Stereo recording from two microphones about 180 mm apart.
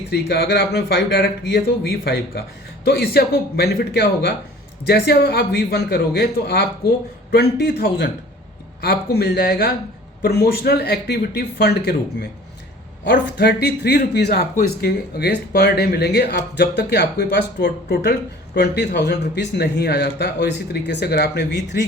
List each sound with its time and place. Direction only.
0.1 s a man's voice: 65° left (ahead or behind)
13.1 s speech: 65° left (ahead or behind)